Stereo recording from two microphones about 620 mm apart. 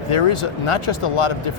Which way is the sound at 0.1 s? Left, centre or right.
Left.